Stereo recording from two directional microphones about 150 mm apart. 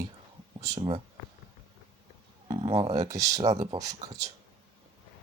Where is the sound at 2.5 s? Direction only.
35° right (ahead or behind).